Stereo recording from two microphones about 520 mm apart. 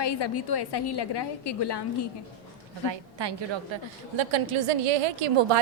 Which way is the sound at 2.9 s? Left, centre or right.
Right.